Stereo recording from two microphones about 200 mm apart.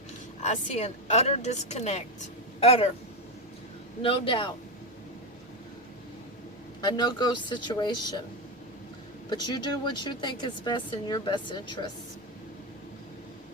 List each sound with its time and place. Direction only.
0.4 s speech: 35° left (ahead or behind)
4.0 s speech: 25° left (ahead or behind)
6.8 s speech: 20° left (ahead or behind)
9.3 s speech: 20° left (ahead or behind)